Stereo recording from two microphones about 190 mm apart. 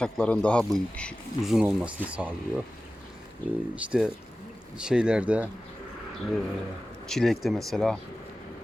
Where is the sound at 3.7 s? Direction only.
5° right (ahead or behind).